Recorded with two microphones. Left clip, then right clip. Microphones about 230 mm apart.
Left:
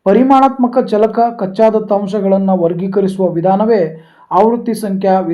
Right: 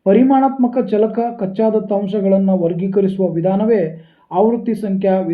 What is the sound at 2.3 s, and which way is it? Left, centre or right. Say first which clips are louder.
Speech: left 3 dB; left.